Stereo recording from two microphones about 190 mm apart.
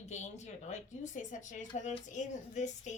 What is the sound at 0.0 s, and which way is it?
A woman's voice, 35° left (ahead or behind).